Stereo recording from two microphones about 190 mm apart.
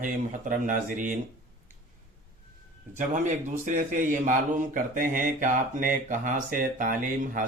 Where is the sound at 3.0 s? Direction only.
40° right (ahead or behind).